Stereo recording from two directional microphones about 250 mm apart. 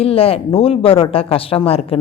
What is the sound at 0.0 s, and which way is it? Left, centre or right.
Speech, left.